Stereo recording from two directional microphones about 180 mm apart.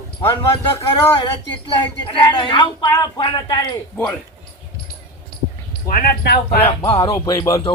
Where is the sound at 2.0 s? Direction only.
25° left (ahead or behind).